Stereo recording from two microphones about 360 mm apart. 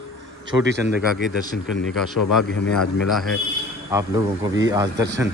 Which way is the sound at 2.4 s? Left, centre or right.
Left.